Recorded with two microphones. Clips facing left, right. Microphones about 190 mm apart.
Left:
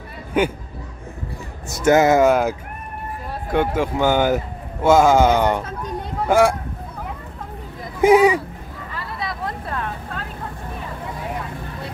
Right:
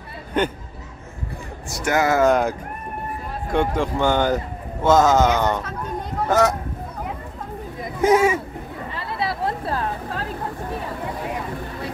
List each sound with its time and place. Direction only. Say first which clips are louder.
0.3 s speech: left 2 dB; 10° left (ahead or behind)
1.7 s speech: left 6 dB; 20° left (ahead or behind)
2.2 s speech: left 1 dB; 5° left (ahead or behind)
3.5 s speech: left 1 dB; 5° left (ahead or behind)
8.0 s speech: left 4 dB; 15° left (ahead or behind)
8.9 s vehicle: right 3 dB; 30° right (ahead or behind)